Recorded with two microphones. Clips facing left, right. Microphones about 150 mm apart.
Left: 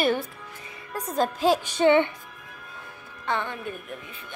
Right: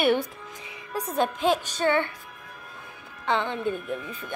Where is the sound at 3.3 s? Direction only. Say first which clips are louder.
Right 4 dB; 20° right (ahead or behind).